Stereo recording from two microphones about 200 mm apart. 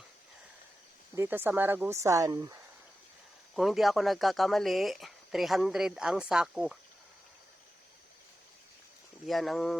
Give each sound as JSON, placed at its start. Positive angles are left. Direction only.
{"t": 1.1, "sound": "speech", "side_deg": -10}
{"t": 3.5, "sound": "speech", "side_deg": 0}
{"t": 9.2, "sound": "speech", "side_deg": 0}